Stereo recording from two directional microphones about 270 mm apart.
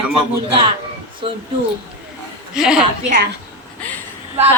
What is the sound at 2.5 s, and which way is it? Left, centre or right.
Speech, centre.